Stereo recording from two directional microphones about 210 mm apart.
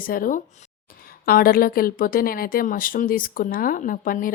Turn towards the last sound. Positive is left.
turn(degrees=40)  # may be behind; listen again after turning